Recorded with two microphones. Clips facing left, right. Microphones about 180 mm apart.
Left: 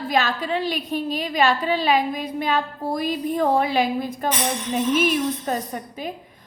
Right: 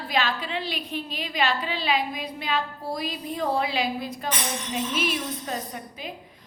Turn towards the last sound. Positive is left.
turn(degrees=50)  # may be behind; listen again after turning